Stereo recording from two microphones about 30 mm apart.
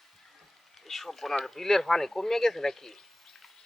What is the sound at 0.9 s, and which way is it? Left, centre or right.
Speech, centre.